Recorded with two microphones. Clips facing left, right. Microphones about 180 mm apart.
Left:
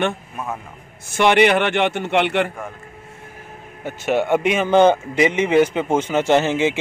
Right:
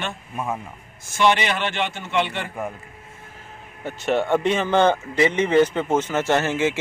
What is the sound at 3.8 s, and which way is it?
A man's voice, 5° left (ahead or behind).